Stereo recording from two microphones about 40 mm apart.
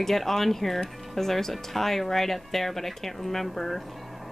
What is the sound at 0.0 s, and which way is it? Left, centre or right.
Speech, centre.